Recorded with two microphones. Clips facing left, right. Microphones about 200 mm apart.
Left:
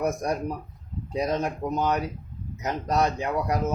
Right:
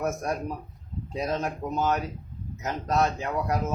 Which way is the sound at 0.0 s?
15° left (ahead or behind).